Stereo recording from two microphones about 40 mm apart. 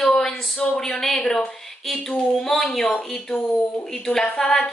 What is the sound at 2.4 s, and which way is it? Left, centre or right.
A woman's voice, centre.